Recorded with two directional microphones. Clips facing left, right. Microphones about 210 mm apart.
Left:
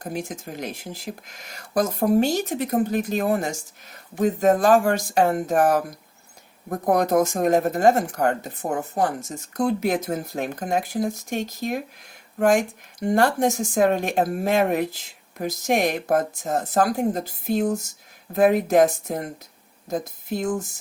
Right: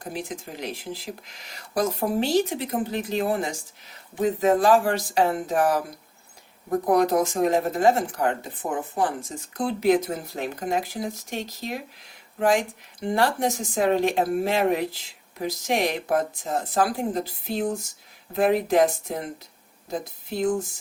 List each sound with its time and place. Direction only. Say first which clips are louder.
0.0 s speech: left 2 dB; 45° left (ahead or behind)
6.8 s speech: left 2 dB; 45° left (ahead or behind)